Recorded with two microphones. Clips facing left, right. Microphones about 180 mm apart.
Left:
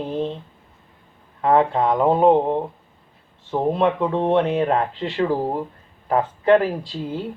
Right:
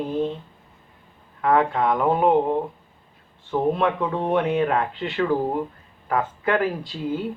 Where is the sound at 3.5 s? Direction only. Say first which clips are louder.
Left 2 dB; 30° left (ahead or behind).